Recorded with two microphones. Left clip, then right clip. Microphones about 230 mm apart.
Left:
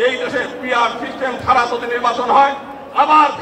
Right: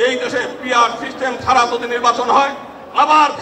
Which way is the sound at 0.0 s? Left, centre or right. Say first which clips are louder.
Even; right.